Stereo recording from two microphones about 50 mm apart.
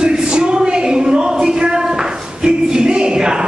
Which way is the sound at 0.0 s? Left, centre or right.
Centre.